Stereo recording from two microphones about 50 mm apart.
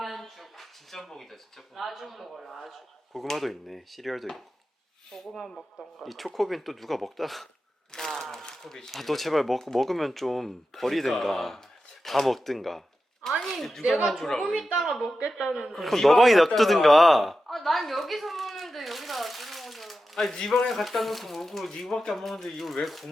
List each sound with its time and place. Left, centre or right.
0.0 s speech: centre
5.5 s speech: centre
6.0 s a woman's voice: centre